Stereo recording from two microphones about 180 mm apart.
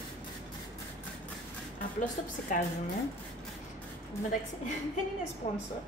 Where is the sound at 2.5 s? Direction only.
50° left (ahead or behind).